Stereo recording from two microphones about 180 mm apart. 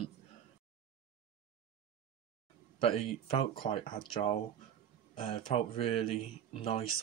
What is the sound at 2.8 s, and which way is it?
Speech, 30° left (ahead or behind).